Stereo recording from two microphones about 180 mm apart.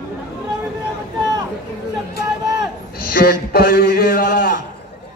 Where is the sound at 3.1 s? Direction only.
55° left (ahead or behind).